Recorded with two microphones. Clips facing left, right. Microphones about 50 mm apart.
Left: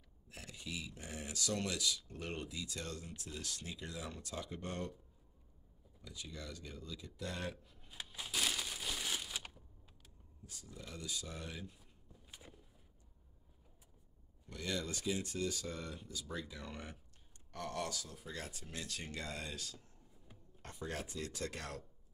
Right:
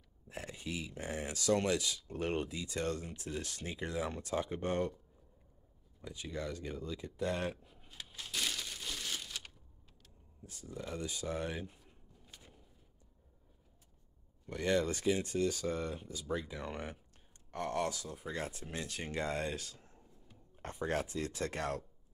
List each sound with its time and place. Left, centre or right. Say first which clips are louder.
0.3 s speech: right 5 dB; right
6.0 s speech: right 8 dB; right
7.6 s a sound: right 3 dB; centre
7.9 s crumpling: even; centre
10.4 s speech: right 8 dB; right
11.8 s a sound: right 2 dB; centre
14.5 s speech: right 9 dB; right
20.5 s a sound: right 8 dB; right
21.1 s speech: right 5 dB; right